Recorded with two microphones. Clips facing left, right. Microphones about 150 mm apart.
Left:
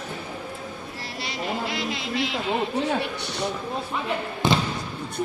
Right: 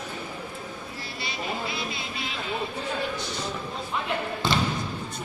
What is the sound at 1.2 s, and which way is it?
Speech, 85° left.